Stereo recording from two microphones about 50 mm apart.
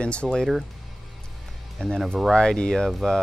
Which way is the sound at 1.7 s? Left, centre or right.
Centre.